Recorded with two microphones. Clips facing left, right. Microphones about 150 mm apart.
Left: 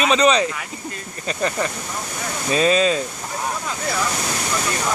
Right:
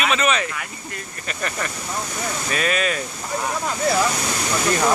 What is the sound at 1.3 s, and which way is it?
Speech, 20° left (ahead or behind).